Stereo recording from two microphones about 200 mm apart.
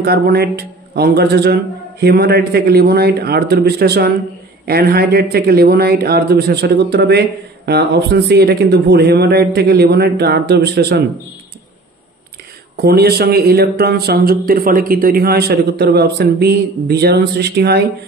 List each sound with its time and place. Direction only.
0.0 s a man's voice: 50° right (ahead or behind)
12.8 s a man's voice: 50° right (ahead or behind)